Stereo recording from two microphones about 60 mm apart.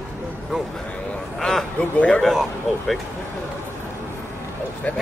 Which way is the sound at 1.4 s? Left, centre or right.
Centre.